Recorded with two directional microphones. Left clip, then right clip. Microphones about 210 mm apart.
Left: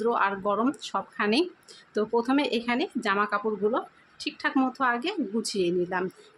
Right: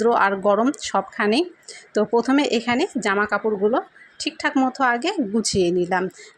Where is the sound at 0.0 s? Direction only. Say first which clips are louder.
Right 8 dB; 25° right (ahead or behind).